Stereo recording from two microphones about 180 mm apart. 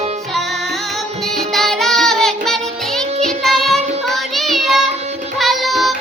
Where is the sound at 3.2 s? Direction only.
Centre (ahead or behind).